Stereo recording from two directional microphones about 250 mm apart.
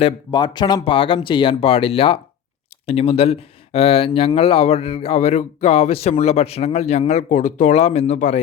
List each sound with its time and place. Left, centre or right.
0.0 s speech: centre